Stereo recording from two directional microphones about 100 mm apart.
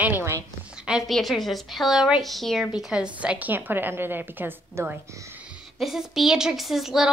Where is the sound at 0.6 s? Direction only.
10° right (ahead or behind).